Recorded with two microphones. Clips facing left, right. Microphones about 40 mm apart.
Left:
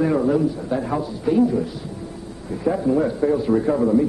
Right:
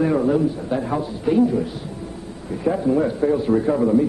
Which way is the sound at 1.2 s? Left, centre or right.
Right.